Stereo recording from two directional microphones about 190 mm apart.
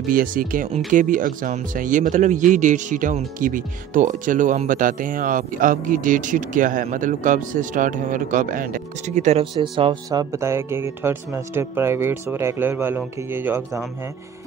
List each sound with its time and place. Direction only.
0.1 s speech: 45° right (ahead or behind); by 10.2 s 25° right (ahead or behind)
10.3 s speech: 15° right (ahead or behind)